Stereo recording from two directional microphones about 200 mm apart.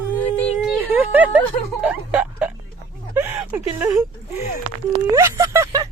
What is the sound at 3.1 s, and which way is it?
Speech, 10° right (ahead or behind).